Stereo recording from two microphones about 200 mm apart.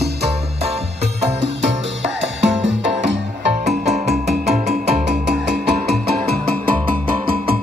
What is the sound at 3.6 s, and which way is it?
Music, 35° right (ahead or behind).